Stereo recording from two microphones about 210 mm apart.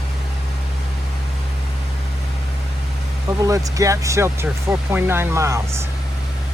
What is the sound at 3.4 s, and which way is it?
Speech, 15° right (ahead or behind).